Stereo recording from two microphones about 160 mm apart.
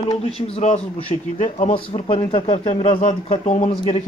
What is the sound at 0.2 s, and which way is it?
Speech, 40° left (ahead or behind).